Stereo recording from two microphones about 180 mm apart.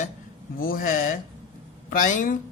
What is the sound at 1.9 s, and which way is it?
Speech, 50° left (ahead or behind).